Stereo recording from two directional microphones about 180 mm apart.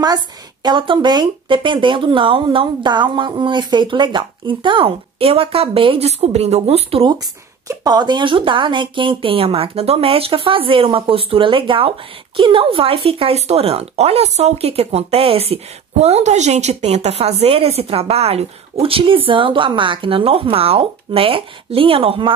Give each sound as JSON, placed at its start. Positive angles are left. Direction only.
{"t": 0.0, "sound": "a woman's voice", "side_deg": -20}